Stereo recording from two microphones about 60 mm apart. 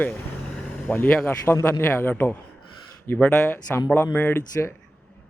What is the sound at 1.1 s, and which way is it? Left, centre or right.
Speech, left.